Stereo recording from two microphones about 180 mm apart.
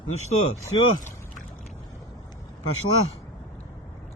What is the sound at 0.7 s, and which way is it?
Speech, 25° left (ahead or behind).